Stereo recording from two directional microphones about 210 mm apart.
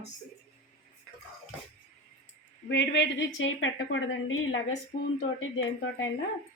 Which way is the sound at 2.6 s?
55° left (ahead or behind).